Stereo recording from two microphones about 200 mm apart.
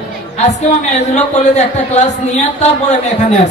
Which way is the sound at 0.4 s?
35° left (ahead or behind).